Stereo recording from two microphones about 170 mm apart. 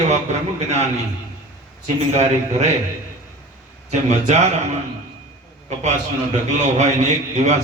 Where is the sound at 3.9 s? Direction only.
40° right (ahead or behind).